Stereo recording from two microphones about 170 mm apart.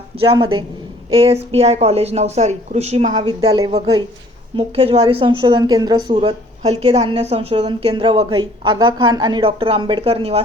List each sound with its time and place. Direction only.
0.2 s a woman's voice: 30° right (ahead or behind)
3.2 s speech: 25° right (ahead or behind)
4.5 s a woman's voice: 35° right (ahead or behind)